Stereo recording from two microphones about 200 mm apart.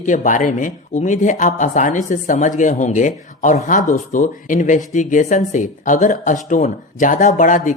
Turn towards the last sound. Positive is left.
turn(degrees=40)  # may be behind; listen again after turning